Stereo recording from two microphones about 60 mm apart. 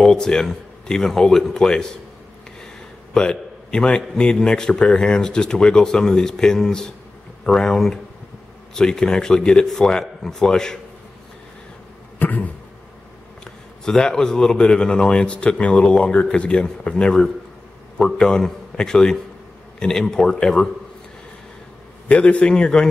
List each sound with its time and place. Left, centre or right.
0.0 s speech: centre
3.2 s a man's voice: centre
12.2 s a sound: left
13.4 s a man's voice: centre
22.0 s a man's voice: left